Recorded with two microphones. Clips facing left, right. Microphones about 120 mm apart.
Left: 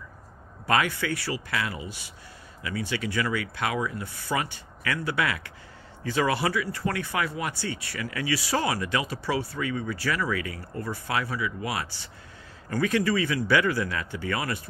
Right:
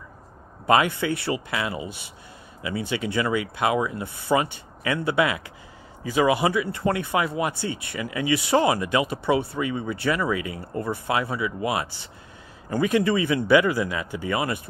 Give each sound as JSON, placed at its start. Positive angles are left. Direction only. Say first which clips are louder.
{"t": 0.7, "sound": "speech", "louder": "right 5 dB", "side_deg": -20}